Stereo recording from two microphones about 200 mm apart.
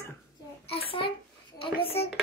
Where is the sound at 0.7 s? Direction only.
30° left (ahead or behind).